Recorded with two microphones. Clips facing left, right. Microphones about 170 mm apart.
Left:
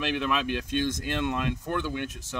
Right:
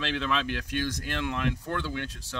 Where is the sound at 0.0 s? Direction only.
15° left (ahead or behind).